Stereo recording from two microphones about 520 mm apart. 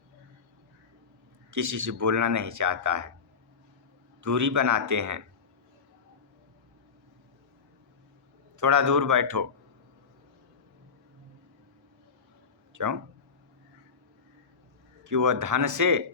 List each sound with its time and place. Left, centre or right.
1.5 s speech: right
4.2 s speech: right
8.5 s speech: right
12.7 s speech: right
15.0 s speech: right